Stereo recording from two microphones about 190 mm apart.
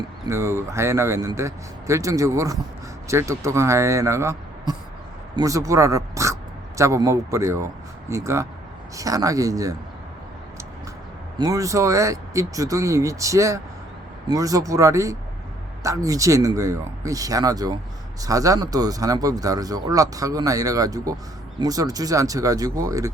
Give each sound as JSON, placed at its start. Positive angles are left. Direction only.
{"t": 0.3, "sound": "speech", "side_deg": -15}
{"t": 11.3, "sound": "speech", "side_deg": -15}